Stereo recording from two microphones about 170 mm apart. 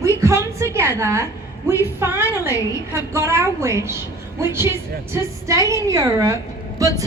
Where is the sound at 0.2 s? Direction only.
15° right (ahead or behind).